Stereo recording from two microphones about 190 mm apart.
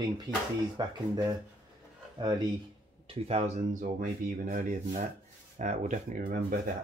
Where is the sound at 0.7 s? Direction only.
20° right (ahead or behind).